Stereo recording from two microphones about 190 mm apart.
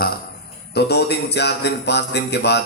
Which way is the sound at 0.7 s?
60° left (ahead or behind).